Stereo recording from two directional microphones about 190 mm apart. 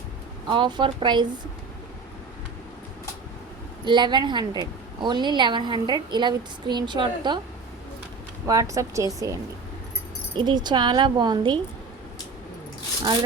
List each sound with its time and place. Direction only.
0.4 s a woman's voice: 25° right (ahead or behind)
3.8 s a woman's voice: 25° right (ahead or behind)
8.4 s a woman's voice: 15° right (ahead or behind)